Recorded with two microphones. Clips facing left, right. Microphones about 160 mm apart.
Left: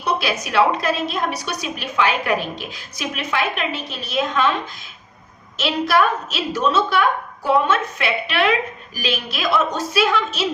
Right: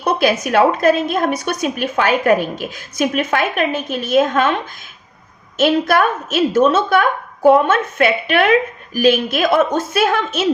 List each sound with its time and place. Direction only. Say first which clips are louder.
0.0 s a woman's voice: right 6 dB; 50° right (ahead or behind)
5.5 s a woman's voice: right 4 dB; 50° right (ahead or behind)